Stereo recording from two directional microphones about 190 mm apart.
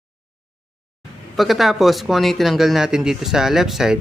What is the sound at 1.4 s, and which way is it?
Speech, centre (ahead or behind).